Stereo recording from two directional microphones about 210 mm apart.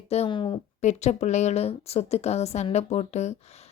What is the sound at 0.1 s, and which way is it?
A woman's voice, 25° left (ahead or behind).